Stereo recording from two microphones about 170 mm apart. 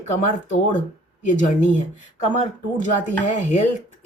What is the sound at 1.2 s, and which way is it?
Speech, 45° left (ahead or behind).